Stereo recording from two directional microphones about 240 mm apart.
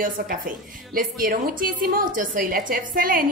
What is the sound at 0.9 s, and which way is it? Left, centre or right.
A woman's voice, right.